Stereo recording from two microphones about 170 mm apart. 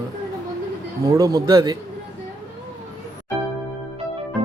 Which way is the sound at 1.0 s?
20° right (ahead or behind).